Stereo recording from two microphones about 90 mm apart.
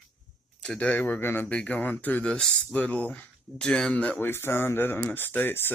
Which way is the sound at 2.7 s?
20° left (ahead or behind).